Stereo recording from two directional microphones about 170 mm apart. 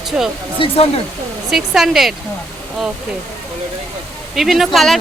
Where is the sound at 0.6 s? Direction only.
30° left (ahead or behind).